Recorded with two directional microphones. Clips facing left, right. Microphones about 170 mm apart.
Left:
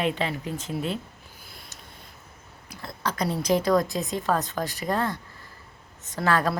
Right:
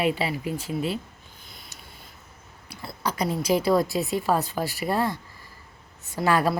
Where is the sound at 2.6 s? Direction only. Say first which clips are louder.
Right 1 dB; 10° right (ahead or behind).